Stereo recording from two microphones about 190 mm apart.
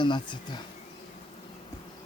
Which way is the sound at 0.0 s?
25° left (ahead or behind).